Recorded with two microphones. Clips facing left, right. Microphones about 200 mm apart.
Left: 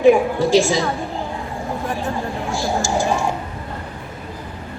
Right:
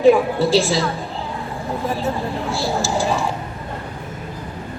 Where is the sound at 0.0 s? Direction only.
15° left (ahead or behind).